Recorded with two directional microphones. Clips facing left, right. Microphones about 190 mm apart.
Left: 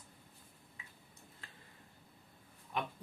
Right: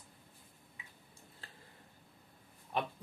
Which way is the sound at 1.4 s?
35° right (ahead or behind).